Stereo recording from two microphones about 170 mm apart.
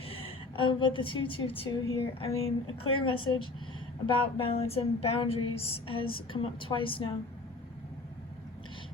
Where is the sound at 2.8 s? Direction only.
30° left (ahead or behind).